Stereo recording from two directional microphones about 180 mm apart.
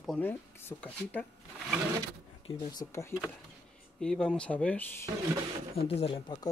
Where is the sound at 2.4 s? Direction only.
20° left (ahead or behind).